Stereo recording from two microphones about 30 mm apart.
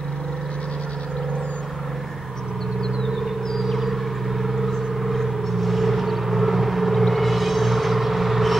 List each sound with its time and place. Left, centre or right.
4.4 s vehicle: centre